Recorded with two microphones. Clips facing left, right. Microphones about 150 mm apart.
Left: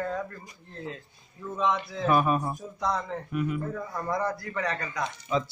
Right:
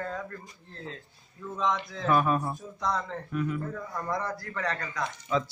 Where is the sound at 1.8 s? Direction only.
15° left (ahead or behind).